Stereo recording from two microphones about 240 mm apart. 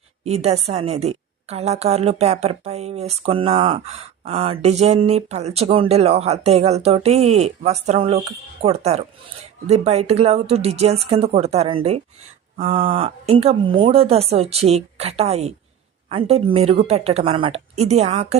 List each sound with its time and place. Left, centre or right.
0.3 s a woman's voice: right